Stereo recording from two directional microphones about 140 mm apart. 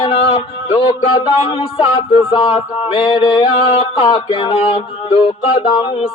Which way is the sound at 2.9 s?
40° left (ahead or behind).